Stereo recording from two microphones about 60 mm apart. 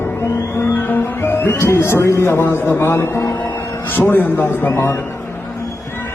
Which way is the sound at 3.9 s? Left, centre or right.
Left.